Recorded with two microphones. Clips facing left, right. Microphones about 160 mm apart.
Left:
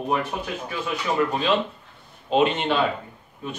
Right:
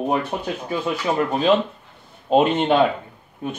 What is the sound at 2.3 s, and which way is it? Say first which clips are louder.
Speech: right 4 dB; 50° right (ahead or behind).